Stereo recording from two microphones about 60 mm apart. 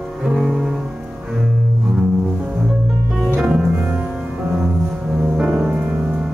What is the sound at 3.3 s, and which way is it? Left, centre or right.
Music, centre.